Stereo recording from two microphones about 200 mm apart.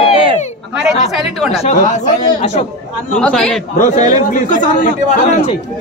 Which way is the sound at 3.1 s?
5° left (ahead or behind).